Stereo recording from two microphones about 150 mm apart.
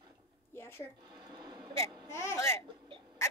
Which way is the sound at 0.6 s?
15° left (ahead or behind).